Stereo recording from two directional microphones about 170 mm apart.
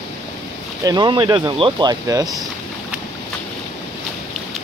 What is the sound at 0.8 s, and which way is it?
Speech, 25° right (ahead or behind).